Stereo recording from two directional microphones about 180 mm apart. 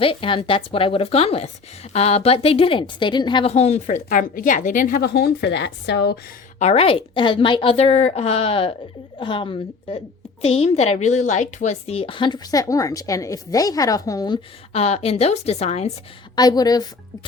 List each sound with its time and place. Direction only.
0.0 s a woman's voice: 30° left (ahead or behind); by 6.1 s 75° left (ahead or behind)
6.6 s a woman's voice: 35° left (ahead or behind); by 14.3 s 20° left (ahead or behind)
14.7 s a woman's voice: 35° left (ahead or behind)
16.3 s a woman's voice: 20° left (ahead or behind)